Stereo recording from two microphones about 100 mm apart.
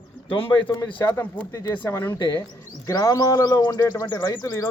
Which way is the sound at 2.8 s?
30° left (ahead or behind).